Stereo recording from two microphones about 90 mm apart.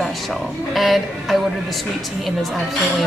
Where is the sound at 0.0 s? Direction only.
Centre (ahead or behind).